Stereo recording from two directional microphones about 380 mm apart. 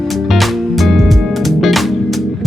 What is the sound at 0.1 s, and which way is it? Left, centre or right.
Music, centre.